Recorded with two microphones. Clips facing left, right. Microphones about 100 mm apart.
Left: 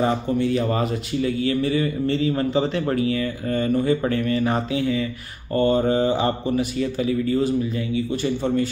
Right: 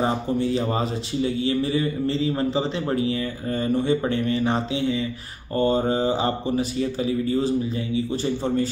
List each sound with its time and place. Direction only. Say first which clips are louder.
0.0 s speech: left 2 dB; 30° right (ahead or behind)